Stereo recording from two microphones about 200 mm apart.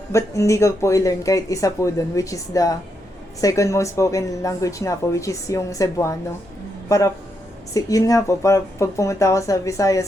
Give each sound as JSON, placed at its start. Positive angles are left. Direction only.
{"t": 0.1, "sound": "a man's voice", "side_deg": 15}